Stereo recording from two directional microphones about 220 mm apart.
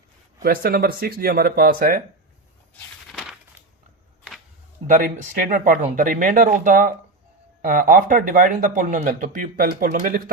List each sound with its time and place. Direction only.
0.4 s speech: 45° right (ahead or behind)
2.8 s a sound: 5° left (ahead or behind)
4.9 s speech: 35° right (ahead or behind)